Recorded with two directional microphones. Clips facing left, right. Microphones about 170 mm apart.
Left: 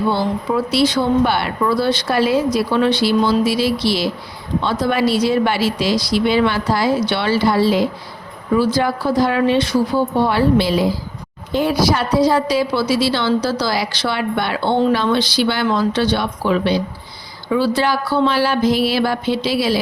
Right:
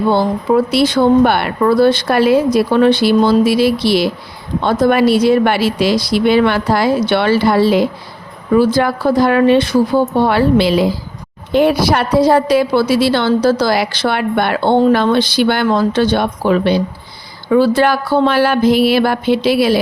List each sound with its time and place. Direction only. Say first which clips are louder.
0.1 s a woman's voice: right 6 dB; 50° right (ahead or behind)